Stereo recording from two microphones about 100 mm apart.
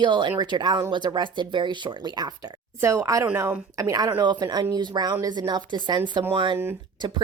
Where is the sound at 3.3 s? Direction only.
20° right (ahead or behind).